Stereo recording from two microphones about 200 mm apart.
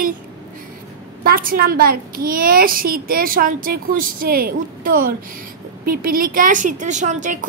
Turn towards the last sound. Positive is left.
turn(degrees=-35)  # may be behind; listen again after turning